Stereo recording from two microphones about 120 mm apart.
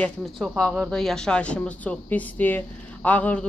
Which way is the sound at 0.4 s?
Centre (ahead or behind).